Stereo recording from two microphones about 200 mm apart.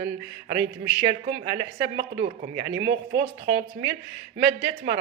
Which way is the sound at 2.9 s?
25° right (ahead or behind).